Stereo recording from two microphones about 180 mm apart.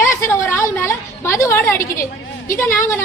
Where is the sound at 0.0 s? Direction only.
15° left (ahead or behind).